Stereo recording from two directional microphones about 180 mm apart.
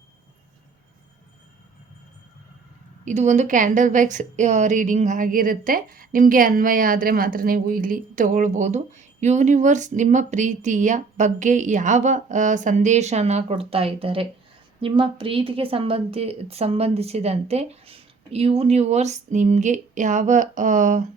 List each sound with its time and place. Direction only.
3.0 s a woman's voice: 40° right (ahead or behind)